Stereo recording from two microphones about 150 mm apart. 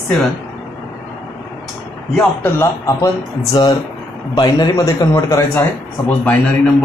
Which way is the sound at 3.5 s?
25° left (ahead or behind).